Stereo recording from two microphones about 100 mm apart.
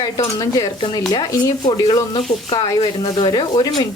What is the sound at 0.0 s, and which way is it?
Speech, 40° left (ahead or behind).